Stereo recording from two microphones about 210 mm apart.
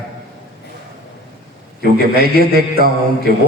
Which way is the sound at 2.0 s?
45° right (ahead or behind).